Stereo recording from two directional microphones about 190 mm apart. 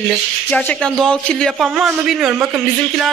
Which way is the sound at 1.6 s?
5° right (ahead or behind).